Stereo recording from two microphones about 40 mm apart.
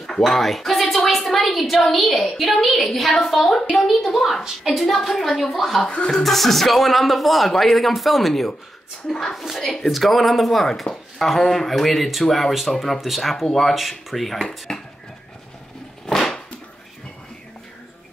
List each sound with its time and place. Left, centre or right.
0.0 s speech: centre
5.9 s speech: left
6.2 s a woman's voice: centre
9.3 s speech: centre
9.6 s a woman's voice: centre
9.8 s speech: centre
16.1 s a sound: centre